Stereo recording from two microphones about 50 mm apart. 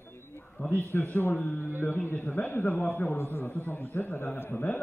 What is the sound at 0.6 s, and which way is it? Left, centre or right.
A man's voice, left.